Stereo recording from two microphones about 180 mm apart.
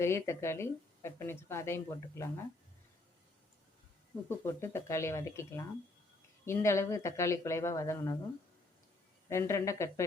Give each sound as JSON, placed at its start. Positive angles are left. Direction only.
{"t": 0.0, "sound": "a woman's voice", "side_deg": 15}
{"t": 4.3, "sound": "a woman's voice", "side_deg": 15}
{"t": 9.3, "sound": "a woman's voice", "side_deg": 15}